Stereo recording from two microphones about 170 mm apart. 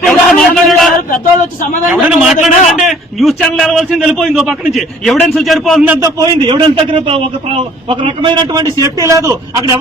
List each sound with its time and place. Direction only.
0.0 s a sound: centre (ahead or behind)
1.9 s a man's voice: 5° right (ahead or behind)
6.0 s a man's voice: 25° right (ahead or behind)
8.8 s a man's voice: 20° right (ahead or behind)